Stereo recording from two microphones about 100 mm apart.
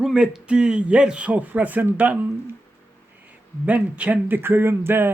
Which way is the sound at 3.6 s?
15° right (ahead or behind).